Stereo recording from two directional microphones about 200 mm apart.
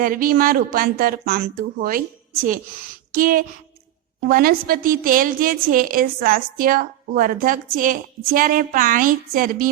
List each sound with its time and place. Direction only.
0.0 s a woman's voice: 45° right (ahead or behind)
3.1 s a woman's voice: 45° right (ahead or behind)